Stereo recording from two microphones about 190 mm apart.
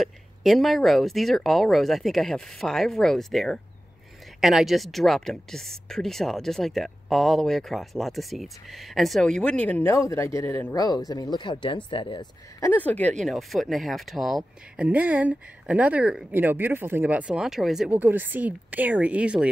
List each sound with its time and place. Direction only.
0.0 s speech: centre (ahead or behind)